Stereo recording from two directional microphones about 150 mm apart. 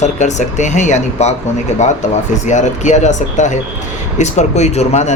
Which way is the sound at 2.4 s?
50° left (ahead or behind).